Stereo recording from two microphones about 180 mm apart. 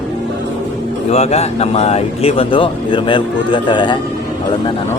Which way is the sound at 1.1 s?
35° left (ahead or behind).